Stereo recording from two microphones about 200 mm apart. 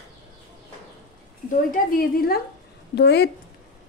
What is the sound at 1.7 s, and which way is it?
A woman's voice, 45° left (ahead or behind).